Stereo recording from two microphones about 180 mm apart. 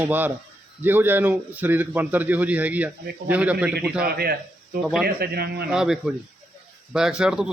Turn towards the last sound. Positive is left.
turn(degrees=-5)  # may be behind; listen again after turning